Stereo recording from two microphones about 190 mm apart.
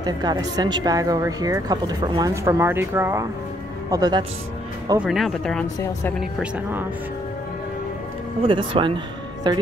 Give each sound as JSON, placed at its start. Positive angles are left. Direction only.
{"t": 0.0, "sound": "speech", "side_deg": -20}
{"t": 4.9, "sound": "a woman's voice", "side_deg": 0}
{"t": 6.4, "sound": "speech", "side_deg": -10}
{"t": 8.4, "sound": "speech", "side_deg": -25}